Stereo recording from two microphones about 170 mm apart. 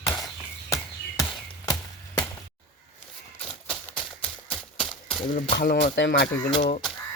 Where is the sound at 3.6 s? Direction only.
5° left (ahead or behind).